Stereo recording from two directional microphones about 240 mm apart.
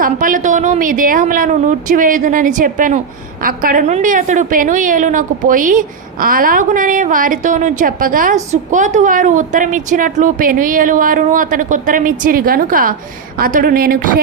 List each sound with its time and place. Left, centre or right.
0.0 s a woman's voice: right